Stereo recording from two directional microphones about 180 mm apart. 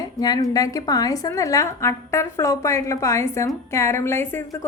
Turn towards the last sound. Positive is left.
turn(degrees=15)  # may be behind; listen again after turning